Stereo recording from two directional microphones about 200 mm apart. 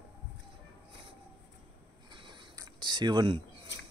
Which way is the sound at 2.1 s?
20° right (ahead or behind).